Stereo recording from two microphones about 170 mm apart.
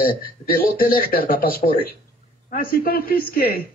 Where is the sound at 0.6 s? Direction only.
60° left (ahead or behind).